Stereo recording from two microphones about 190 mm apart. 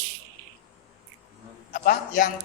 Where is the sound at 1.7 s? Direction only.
45° left (ahead or behind).